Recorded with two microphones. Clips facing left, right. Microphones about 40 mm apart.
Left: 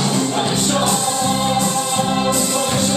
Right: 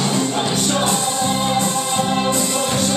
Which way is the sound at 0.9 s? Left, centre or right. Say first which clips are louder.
Left 1 dB; centre.